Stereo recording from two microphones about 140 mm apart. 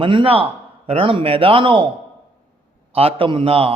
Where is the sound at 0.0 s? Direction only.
35° right (ahead or behind).